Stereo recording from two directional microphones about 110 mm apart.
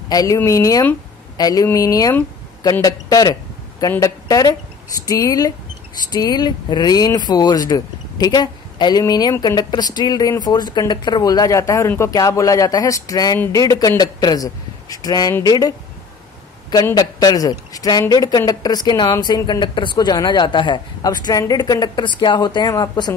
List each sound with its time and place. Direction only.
0.1 s a man's voice: 35° left (ahead or behind)
16.9 s a man's voice: 35° left (ahead or behind)